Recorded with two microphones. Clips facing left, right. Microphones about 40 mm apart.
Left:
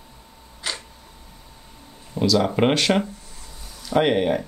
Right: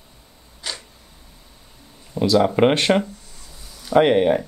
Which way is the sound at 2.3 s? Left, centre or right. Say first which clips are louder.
Right 4 dB; centre.